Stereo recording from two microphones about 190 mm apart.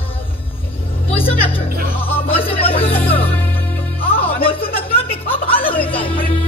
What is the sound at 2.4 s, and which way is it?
Music, 30° left (ahead or behind).